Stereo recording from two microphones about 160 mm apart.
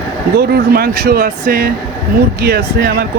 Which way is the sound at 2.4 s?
80° right.